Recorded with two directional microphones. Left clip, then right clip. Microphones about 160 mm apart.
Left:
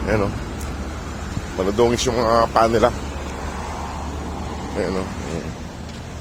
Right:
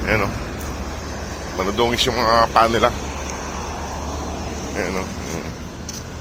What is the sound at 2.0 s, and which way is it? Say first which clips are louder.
Speech: right 2 dB; 60° left (ahead or behind).